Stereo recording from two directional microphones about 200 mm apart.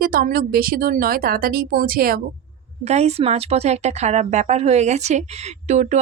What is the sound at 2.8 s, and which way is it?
Speech, 35° right (ahead or behind).